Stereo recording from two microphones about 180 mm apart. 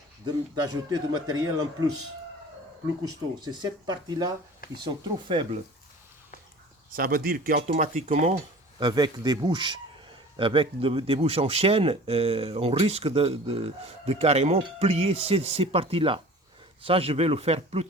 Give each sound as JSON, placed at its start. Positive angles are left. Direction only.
{"t": 0.3, "sound": "a man's voice", "side_deg": -20}
{"t": 3.0, "sound": "a man's voice", "side_deg": -20}
{"t": 6.9, "sound": "speech", "side_deg": -55}
{"t": 8.8, "sound": "a man's voice", "side_deg": -25}